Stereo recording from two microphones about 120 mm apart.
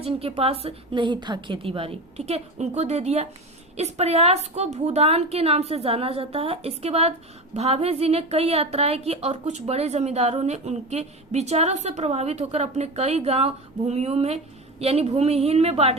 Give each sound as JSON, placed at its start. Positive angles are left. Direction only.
{"t": 0.0, "sound": "a woman's voice", "side_deg": -55}